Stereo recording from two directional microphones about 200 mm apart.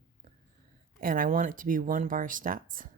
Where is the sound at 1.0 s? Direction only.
45° right (ahead or behind).